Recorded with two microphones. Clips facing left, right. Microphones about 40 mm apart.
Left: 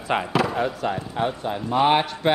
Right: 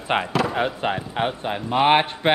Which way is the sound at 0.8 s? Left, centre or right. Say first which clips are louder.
Right 1 dB; right.